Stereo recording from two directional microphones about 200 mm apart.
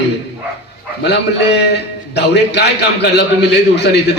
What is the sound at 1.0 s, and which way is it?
A man's voice, 60° left (ahead or behind).